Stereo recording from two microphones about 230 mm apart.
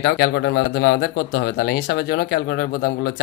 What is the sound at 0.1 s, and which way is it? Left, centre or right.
Speech, left.